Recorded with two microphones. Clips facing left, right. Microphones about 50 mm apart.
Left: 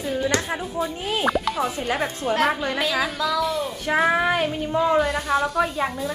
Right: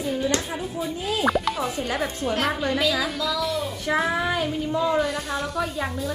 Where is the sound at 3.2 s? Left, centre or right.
Left.